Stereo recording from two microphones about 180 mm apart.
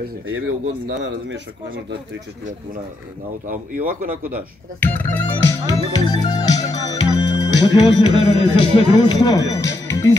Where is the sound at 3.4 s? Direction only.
50° right (ahead or behind).